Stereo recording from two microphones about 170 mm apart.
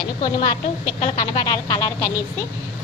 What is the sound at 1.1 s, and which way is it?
Speech, 25° left (ahead or behind).